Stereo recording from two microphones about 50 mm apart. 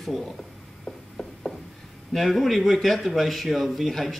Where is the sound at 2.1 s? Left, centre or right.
Centre.